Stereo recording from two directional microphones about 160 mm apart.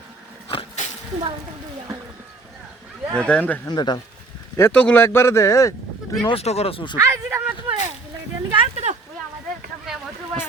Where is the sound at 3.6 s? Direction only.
25° left (ahead or behind).